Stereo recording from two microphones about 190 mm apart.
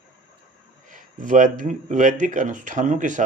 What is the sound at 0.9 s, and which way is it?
Speech, 45° right (ahead or behind).